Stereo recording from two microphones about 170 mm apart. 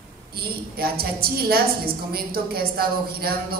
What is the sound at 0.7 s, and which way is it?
A man's voice, 60° right (ahead or behind).